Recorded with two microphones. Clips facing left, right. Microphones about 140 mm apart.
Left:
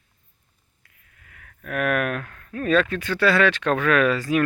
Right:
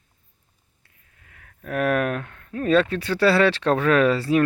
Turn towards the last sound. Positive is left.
turn(degrees=-30)  # may be behind; listen again after turning